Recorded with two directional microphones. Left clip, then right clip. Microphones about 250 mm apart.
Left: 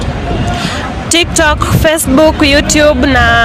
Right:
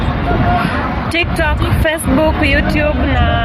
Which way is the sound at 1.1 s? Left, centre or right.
Left.